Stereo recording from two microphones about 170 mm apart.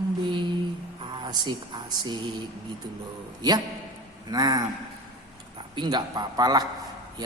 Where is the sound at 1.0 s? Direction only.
25° right (ahead or behind).